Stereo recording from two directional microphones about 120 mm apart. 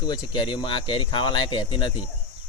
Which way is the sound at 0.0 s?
40° left (ahead or behind).